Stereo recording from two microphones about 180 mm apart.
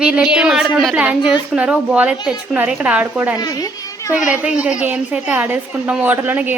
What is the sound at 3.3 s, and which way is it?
Speech, 20° left (ahead or behind).